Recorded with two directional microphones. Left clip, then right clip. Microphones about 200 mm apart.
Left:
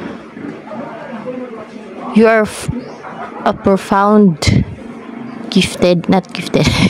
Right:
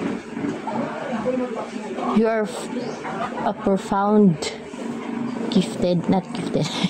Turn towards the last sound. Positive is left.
turn(degrees=30)  # may be behind; listen again after turning